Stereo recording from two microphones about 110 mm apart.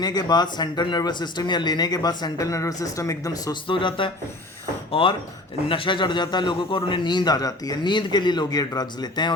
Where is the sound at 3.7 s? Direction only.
50° left (ahead or behind).